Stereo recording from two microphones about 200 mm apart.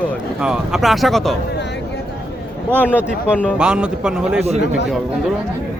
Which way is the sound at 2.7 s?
10° left (ahead or behind).